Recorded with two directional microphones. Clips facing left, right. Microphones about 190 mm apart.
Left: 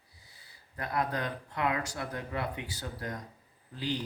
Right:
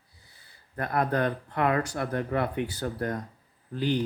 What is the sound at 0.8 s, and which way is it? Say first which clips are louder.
Speech: right 6 dB; 55° right (ahead or behind).